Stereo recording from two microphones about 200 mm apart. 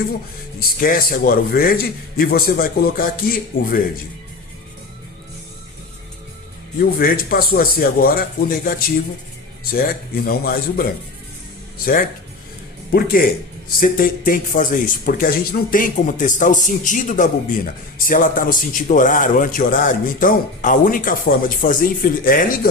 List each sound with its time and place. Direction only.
0.8 s a man's voice: 45° left (ahead or behind)
6.7 s a man's voice: 45° left (ahead or behind)
9.7 s a man's voice: 45° left (ahead or behind)
12.9 s a man's voice: 50° left (ahead or behind)